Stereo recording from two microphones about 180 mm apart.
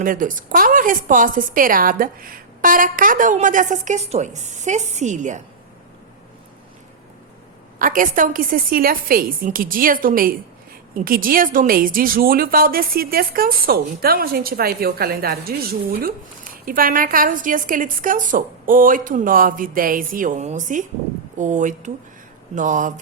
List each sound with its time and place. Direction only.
0.0 s a woman's voice: 50° right (ahead or behind)
7.8 s a woman's voice: 50° right (ahead or behind)